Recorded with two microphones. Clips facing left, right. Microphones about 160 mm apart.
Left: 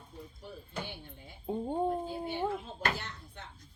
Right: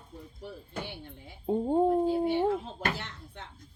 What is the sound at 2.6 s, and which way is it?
Speech, 90° right.